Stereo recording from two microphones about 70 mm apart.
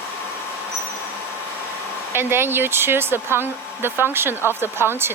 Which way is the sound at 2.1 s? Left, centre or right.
Right.